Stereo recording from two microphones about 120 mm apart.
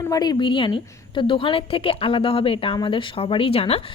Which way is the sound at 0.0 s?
35° left (ahead or behind).